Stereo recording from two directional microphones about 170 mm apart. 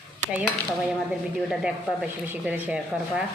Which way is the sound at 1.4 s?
5° right (ahead or behind).